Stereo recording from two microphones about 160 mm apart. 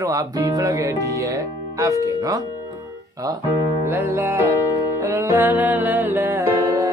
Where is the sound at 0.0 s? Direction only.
20° right (ahead or behind).